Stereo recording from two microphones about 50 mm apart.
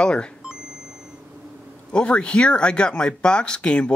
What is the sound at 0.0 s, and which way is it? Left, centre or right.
Speech, centre.